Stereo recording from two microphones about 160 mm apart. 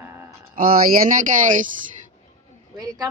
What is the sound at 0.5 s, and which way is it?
Speech, 65° right (ahead or behind).